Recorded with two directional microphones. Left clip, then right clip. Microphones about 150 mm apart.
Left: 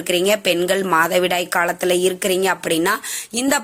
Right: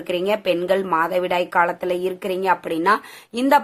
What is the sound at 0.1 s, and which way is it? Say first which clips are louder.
Speech: left 3 dB; 15° left (ahead or behind).